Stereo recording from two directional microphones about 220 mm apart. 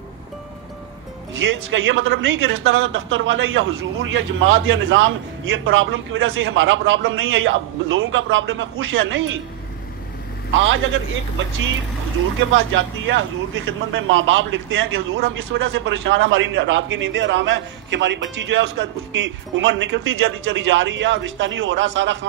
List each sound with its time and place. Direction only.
1.3 s a man's voice: 60° right (ahead or behind)
10.5 s a man's voice: 60° right (ahead or behind)
12.5 s a man's voice: 60° right (ahead or behind)